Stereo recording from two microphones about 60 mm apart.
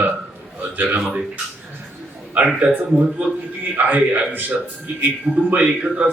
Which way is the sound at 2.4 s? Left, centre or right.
Right.